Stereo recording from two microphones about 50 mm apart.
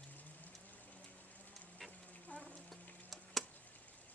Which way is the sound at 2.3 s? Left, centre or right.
Left.